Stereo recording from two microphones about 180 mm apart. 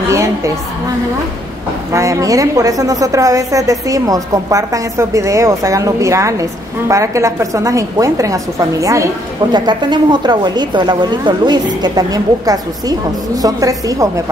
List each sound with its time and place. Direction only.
0.1 s a woman's voice: 15° right (ahead or behind)
1.9 s a woman's voice: 15° right (ahead or behind)